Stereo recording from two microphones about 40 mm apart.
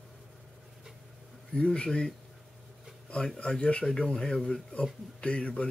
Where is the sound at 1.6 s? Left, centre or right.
Left.